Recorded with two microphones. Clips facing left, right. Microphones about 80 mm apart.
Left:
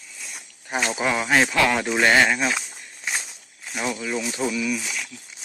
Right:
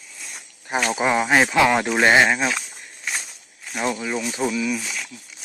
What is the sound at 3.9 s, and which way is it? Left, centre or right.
Speech, centre.